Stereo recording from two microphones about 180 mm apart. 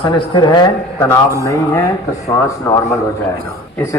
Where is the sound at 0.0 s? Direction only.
25° left (ahead or behind).